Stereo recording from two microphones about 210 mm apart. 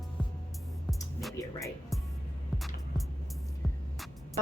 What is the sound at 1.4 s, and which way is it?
Music, 15° left (ahead or behind).